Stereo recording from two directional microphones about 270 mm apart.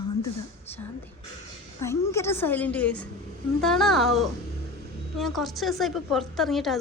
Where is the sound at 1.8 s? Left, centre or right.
Centre.